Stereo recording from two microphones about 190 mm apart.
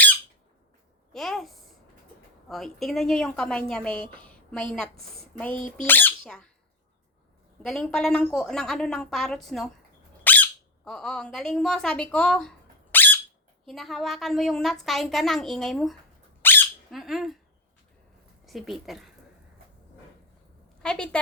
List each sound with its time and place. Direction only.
1.1 s a sound: centre (ahead or behind)
2.5 s a woman's voice: centre (ahead or behind)
5.5 s speech: 40° left (ahead or behind)
5.8 s speech: 10° left (ahead or behind)
7.6 s a woman's voice: 5° left (ahead or behind)
10.2 s squeak: 10° left (ahead or behind)
13.7 s a woman's voice: centre (ahead or behind)
16.4 s squeak: 10° left (ahead or behind)
16.9 s a woman's voice: centre (ahead or behind)
18.4 s speech: centre (ahead or behind)
20.8 s a woman's voice: 5° left (ahead or behind)